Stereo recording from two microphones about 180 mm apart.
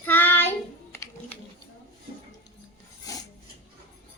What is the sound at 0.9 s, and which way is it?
Music, 15° left (ahead or behind).